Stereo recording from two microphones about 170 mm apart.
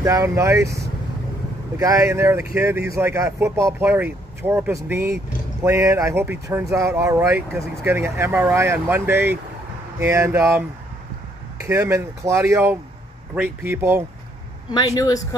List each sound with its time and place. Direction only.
0.0 s speech: 15° right (ahead or behind)
11.6 s speech: 15° right (ahead or behind)
14.7 s a man's voice: 25° left (ahead or behind)